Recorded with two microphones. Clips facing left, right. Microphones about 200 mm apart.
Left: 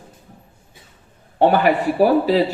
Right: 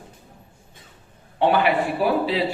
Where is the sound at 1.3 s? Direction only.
45° left (ahead or behind).